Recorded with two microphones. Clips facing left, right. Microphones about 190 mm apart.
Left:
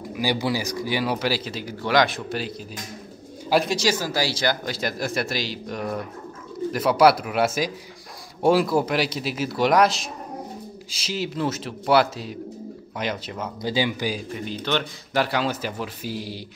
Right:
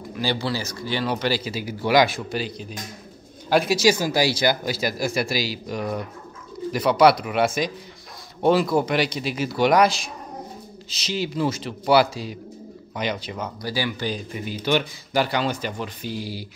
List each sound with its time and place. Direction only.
0.1 s speech: 15° left (ahead or behind)
3.6 s speech: 10° right (ahead or behind)
13.6 s speech: 20° left (ahead or behind)
14.3 s speech: 10° right (ahead or behind)
15.2 s speech: centre (ahead or behind)